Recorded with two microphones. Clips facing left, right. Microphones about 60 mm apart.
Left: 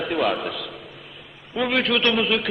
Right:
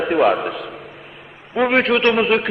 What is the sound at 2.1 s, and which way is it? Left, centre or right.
Speech, right.